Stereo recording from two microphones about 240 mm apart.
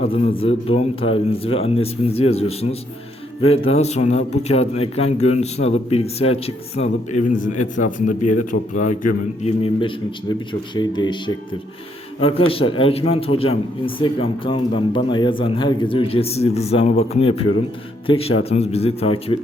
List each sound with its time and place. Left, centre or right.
0.0 s a man's voice: left